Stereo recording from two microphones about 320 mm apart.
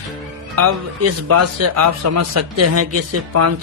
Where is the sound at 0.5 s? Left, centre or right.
Right.